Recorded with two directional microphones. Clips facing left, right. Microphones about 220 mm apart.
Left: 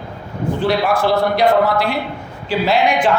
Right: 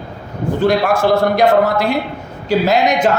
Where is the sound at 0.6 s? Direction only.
45° right (ahead or behind).